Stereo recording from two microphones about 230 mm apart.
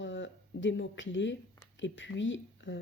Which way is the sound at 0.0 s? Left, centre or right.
Left.